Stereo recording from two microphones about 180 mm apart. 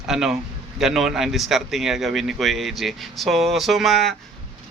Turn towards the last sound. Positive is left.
turn(degrees=0)  # may be behind; listen again after turning